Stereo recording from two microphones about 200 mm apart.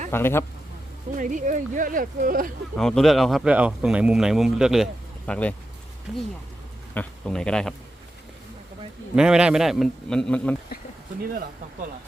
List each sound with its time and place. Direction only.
0.1 s speech: 10° left (ahead or behind)
1.1 s speech: 40° right (ahead or behind)
2.7 s speech: centre (ahead or behind)
6.9 s speech: 5° left (ahead or behind)
9.1 s speech: 5° right (ahead or behind)